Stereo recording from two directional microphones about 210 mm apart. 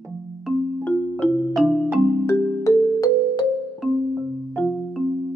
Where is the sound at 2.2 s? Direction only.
15° left (ahead or behind).